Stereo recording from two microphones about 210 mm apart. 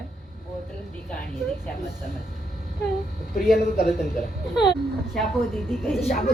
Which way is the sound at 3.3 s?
45° left (ahead or behind).